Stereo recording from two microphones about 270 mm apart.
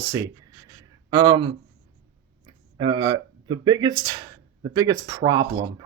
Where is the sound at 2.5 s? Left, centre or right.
Centre.